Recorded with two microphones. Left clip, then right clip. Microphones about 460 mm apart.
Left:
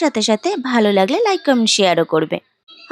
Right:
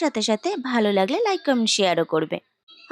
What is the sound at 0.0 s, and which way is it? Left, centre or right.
Speech, centre.